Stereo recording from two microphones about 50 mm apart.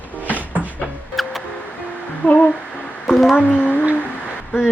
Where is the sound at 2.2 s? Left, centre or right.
Left.